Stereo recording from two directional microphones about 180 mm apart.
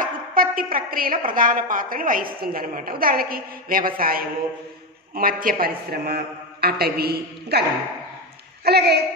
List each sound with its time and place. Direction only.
0.0 s a woman's voice: 50° right (ahead or behind)
8.6 s a man's voice: 65° right (ahead or behind)